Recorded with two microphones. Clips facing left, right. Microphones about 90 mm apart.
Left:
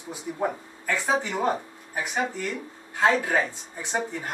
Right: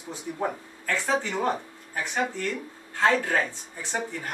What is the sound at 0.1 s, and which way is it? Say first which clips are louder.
Speech: left 2 dB; 10° left (ahead or behind).